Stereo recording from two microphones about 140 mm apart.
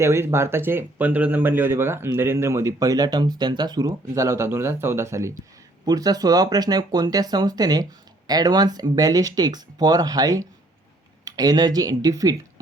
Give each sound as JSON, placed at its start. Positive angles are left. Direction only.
{"t": 0.0, "sound": "speech", "side_deg": -20}